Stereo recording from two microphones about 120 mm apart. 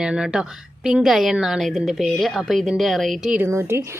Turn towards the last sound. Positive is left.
turn(degrees=-20)  # may be behind; listen again after turning